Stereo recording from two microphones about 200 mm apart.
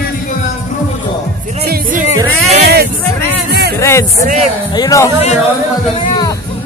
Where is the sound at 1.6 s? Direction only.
50° right (ahead or behind).